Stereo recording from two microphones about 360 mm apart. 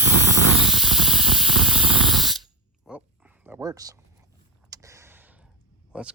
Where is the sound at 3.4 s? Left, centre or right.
Centre.